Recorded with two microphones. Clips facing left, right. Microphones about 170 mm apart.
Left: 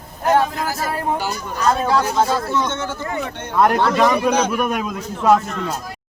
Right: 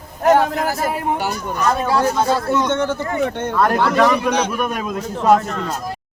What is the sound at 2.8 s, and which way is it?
Speech, 55° right (ahead or behind).